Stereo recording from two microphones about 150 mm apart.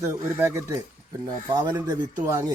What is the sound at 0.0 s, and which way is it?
Speech, 20° right (ahead or behind).